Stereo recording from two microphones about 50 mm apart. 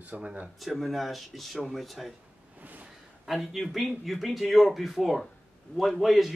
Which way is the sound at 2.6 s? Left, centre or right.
Right.